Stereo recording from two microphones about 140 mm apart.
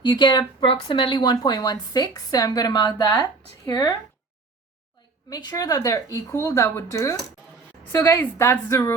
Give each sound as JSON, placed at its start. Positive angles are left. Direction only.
{"t": 0.0, "sound": "a woman's voice", "side_deg": 35}
{"t": 5.3, "sound": "a woman's voice", "side_deg": 30}